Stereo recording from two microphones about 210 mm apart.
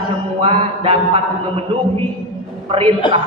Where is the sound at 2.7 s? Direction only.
25° right (ahead or behind).